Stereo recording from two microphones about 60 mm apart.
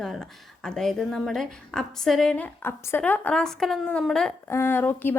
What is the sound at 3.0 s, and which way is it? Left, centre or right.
Speech, left.